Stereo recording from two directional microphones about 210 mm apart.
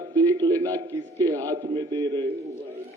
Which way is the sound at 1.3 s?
15° right (ahead or behind).